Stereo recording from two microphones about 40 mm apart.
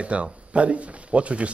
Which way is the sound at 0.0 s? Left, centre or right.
Right.